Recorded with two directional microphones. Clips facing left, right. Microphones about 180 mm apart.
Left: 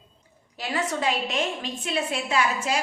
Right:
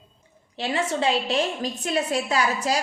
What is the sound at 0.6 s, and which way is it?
Speech, 25° right (ahead or behind).